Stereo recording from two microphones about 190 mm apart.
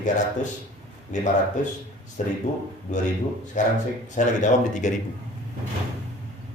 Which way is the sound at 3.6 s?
40° left (ahead or behind).